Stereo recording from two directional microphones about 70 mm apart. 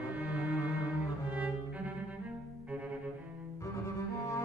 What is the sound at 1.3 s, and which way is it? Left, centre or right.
Cello, right.